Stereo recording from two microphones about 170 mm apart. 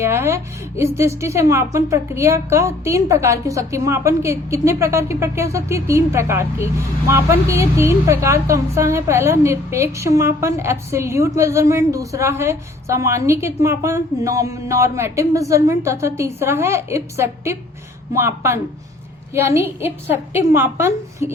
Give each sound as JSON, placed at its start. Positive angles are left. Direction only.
{"t": 0.0, "sound": "a woman's voice", "side_deg": -15}